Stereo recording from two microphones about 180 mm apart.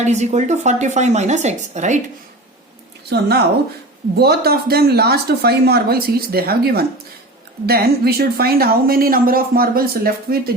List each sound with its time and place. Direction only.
0.0 s speech: 40° right (ahead or behind)
3.1 s speech: 60° right (ahead or behind)